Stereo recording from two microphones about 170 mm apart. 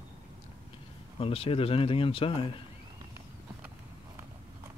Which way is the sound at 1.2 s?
35° left (ahead or behind).